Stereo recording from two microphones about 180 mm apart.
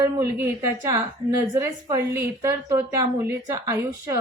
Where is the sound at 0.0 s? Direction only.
15° right (ahead or behind).